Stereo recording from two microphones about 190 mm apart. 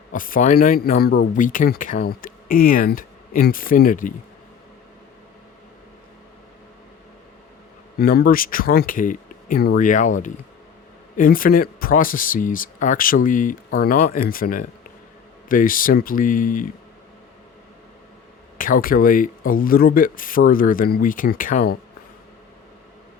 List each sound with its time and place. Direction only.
0.1 s speech: 45° left (ahead or behind)
7.9 s speech: 50° left (ahead or behind)
18.5 s speech: 45° left (ahead or behind)